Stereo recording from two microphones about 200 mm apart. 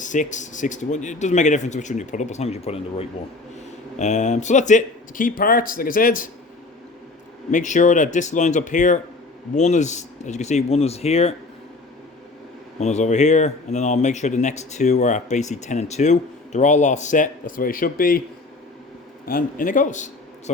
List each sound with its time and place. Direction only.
0.0 s speech: 40° left (ahead or behind)
7.5 s speech: 40° left (ahead or behind)
12.8 s speech: 35° left (ahead or behind)
19.3 s speech: 45° left (ahead or behind)